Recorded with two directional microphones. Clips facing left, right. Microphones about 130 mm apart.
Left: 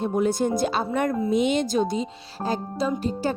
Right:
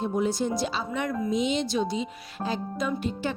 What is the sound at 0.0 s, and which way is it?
Speech, 55° left (ahead or behind).